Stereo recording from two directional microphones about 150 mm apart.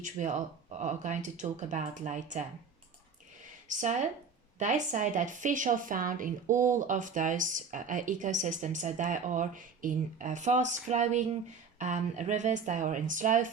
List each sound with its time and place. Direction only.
0.0 s speech: 55° right (ahead or behind)
3.7 s speech: 55° right (ahead or behind)